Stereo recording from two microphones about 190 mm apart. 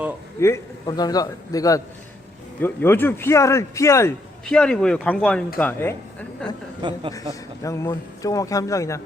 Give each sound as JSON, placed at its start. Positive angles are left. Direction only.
{"t": 0.3, "sound": "a man's voice", "side_deg": 15}
{"t": 4.4, "sound": "a woman's voice", "side_deg": 5}
{"t": 7.6, "sound": "speech", "side_deg": 15}